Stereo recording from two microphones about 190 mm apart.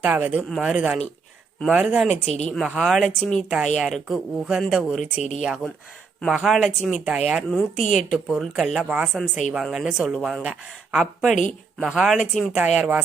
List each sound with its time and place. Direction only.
0.0 s a woman's voice: 10° right (ahead or behind)